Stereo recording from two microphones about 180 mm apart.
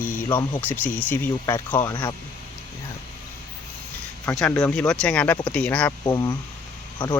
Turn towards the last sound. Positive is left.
turn(degrees=10)  # may be behind; listen again after turning